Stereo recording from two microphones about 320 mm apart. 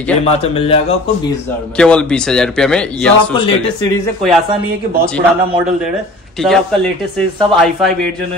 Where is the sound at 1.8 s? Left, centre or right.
Centre.